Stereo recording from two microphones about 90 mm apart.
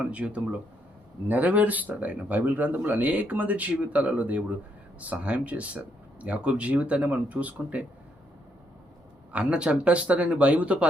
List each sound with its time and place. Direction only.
0.0 s speech: 15° right (ahead or behind)
9.3 s speech: 10° right (ahead or behind)